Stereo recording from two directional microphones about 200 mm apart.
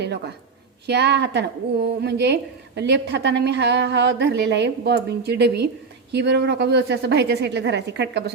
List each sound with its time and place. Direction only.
0.9 s a woman's voice: 55° right (ahead or behind)